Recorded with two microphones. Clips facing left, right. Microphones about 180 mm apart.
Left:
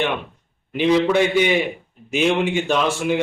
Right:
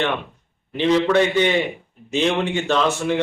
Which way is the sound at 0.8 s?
10° left (ahead or behind).